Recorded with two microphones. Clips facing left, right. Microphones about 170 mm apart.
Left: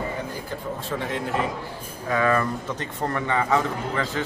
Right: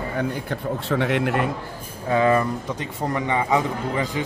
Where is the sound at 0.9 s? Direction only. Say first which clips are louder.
Right 7 dB; 70° right (ahead or behind).